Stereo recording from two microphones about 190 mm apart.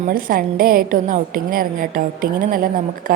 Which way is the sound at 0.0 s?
50° right (ahead or behind).